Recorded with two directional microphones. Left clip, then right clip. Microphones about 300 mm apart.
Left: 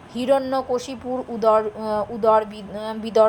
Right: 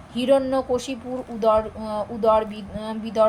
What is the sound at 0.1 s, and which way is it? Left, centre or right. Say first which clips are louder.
Speech: even; left.